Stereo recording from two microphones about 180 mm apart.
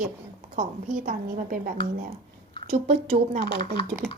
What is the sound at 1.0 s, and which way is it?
Speech, 50° right (ahead or behind).